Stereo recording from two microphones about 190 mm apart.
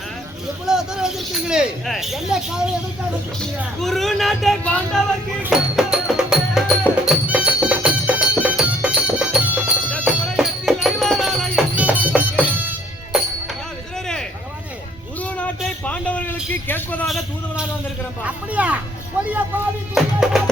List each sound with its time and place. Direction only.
0.6 s speech: 5° right (ahead or behind)
3.6 s speech: centre (ahead or behind)
5.4 s music: 5° right (ahead or behind)
15.2 s a sound: 5° left (ahead or behind)
18.3 s a sound: 5° right (ahead or behind)
19.9 s music: centre (ahead or behind)